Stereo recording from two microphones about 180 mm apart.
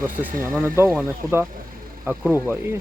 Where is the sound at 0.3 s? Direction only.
50° right (ahead or behind).